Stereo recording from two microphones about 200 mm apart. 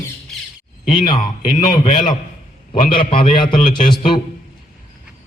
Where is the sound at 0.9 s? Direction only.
20° left (ahead or behind).